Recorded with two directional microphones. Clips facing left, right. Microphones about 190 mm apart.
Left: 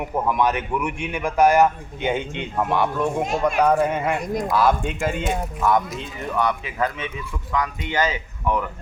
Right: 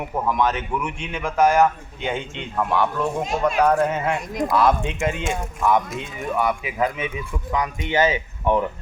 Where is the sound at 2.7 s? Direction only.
15° left (ahead or behind).